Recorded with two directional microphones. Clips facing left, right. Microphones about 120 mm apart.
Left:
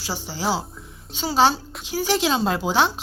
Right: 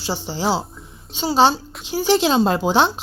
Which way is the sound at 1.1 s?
25° right (ahead or behind).